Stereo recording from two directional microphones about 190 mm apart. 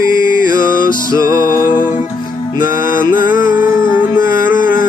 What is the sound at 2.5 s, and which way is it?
Music, 45° left (ahead or behind).